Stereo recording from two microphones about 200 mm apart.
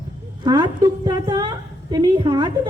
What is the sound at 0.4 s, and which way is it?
A woman's voice, 20° right (ahead or behind).